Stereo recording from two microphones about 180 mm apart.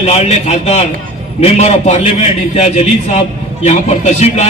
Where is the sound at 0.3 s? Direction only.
35° left (ahead or behind).